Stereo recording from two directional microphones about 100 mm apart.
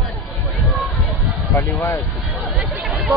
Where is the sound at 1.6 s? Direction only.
20° left (ahead or behind).